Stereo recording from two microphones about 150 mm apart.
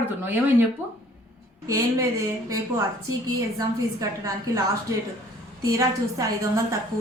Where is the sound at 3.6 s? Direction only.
25° right (ahead or behind).